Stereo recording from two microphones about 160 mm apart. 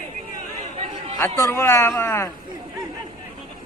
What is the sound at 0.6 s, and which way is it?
Chatter, 40° right (ahead or behind).